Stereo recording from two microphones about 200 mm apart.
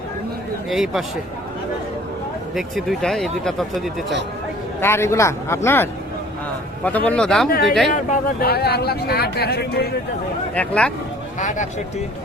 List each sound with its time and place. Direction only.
0.7 s speech: centre (ahead or behind)
2.6 s speech: centre (ahead or behind)
4.8 s speech: 10° left (ahead or behind)
7.9 s speech: 50° left (ahead or behind)
10.5 s speech: 5° left (ahead or behind)
11.3 s speech: 40° left (ahead or behind)